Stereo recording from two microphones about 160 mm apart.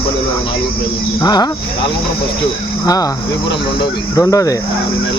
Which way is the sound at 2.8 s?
25° left (ahead or behind).